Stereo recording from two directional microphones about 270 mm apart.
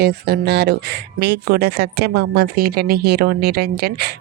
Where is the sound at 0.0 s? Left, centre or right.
Right.